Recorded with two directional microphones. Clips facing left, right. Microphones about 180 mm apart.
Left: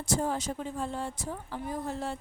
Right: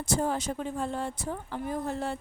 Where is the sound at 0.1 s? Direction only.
60° right (ahead or behind).